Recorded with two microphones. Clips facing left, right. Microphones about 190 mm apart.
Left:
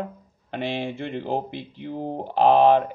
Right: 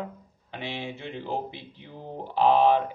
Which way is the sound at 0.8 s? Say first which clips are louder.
Left 6 dB; 55° left (ahead or behind).